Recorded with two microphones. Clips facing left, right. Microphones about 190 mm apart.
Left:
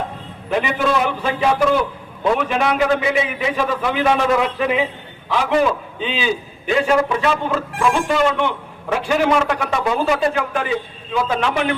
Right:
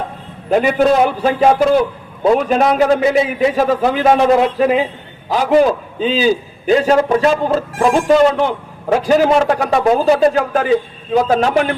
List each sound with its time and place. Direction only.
0.5 s a man's voice: 45° right (ahead or behind)